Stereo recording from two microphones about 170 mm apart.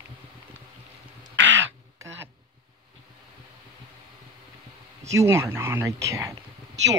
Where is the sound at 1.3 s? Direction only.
90° right.